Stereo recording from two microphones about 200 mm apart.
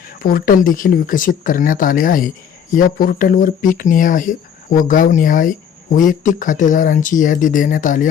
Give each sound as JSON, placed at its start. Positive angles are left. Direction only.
{"t": 0.2, "sound": "speech", "side_deg": 45}